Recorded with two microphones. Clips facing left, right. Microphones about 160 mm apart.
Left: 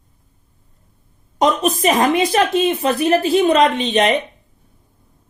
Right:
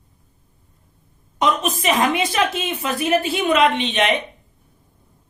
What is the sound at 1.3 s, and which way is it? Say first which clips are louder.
Speech: left 4 dB; 40° left (ahead or behind).